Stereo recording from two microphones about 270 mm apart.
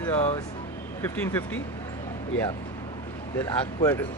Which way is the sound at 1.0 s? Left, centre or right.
Centre.